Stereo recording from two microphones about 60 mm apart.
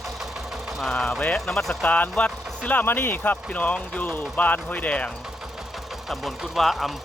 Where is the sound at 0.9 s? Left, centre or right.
Centre.